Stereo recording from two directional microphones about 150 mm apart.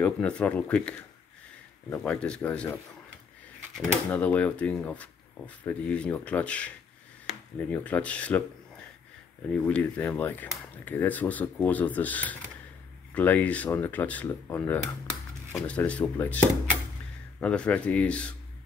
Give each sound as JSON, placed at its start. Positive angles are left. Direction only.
{"t": 0.0, "sound": "speech", "side_deg": 10}
{"t": 4.1, "sound": "speech", "side_deg": 10}
{"t": 9.5, "sound": "speech", "side_deg": 10}